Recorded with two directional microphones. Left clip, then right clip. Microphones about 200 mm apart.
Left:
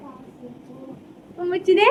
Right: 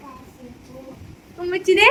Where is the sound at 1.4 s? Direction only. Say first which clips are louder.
Right 1 dB; 10° right (ahead or behind).